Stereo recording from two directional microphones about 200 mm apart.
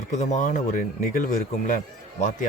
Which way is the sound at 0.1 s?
35° left (ahead or behind).